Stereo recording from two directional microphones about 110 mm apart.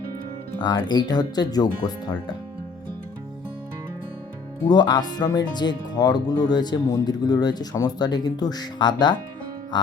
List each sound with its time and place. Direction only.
0.6 s speech: 40° left (ahead or behind)
4.7 s speech: 40° left (ahead or behind)
9.7 s music: 40° left (ahead or behind)